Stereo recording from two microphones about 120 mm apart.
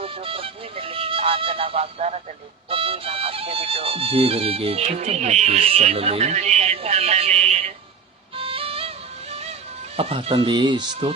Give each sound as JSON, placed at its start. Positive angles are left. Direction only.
{"t": 0.0, "sound": "music", "side_deg": -50}
{"t": 2.6, "sound": "speech", "side_deg": -50}
{"t": 8.4, "sound": "music", "side_deg": -50}
{"t": 10.0, "sound": "speech", "side_deg": -55}